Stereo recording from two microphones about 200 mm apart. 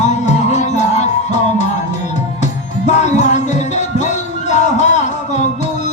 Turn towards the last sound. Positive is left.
turn(degrees=35)  # may be behind; listen again after turning